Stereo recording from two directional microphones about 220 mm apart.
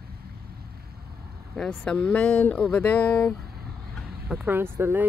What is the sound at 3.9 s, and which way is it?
Speech, 5° right (ahead or behind).